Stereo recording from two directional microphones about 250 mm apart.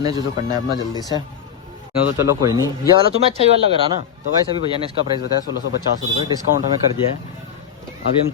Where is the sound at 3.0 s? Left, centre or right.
Right.